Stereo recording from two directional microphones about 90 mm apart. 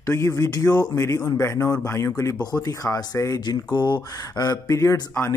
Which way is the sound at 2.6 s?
45° left (ahead or behind).